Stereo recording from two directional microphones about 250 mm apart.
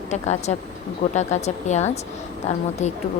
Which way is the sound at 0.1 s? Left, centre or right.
Left.